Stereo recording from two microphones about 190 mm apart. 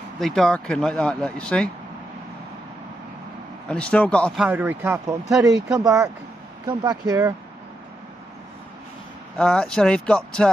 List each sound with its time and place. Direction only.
0.2 s speech: centre (ahead or behind)
3.6 s speech: 5° left (ahead or behind)
4.5 s speech: 10° right (ahead or behind)
9.4 s speech: 5° left (ahead or behind)